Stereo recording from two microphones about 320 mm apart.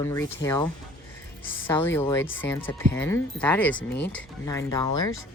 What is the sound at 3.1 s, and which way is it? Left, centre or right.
Speech, centre.